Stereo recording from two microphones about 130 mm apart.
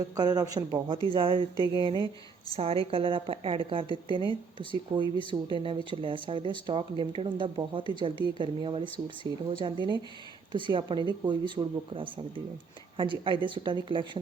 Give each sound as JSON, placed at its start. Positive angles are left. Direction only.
{"t": 0.0, "sound": "speech", "side_deg": -30}
{"t": 1.1, "sound": "a woman's voice", "side_deg": -40}